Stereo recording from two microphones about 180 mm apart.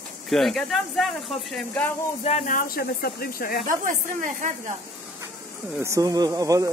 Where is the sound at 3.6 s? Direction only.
45° right (ahead or behind).